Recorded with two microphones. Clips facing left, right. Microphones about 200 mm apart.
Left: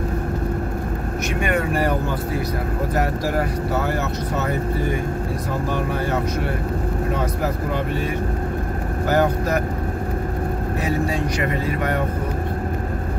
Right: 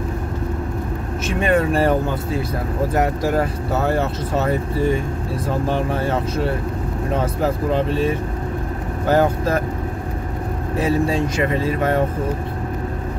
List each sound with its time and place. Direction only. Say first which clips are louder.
1.4 s speech: right 5 dB; 30° right (ahead or behind)
7.4 s speech: right 4 dB; 25° right (ahead or behind)
10.8 s speech: right 5 dB; 25° right (ahead or behind)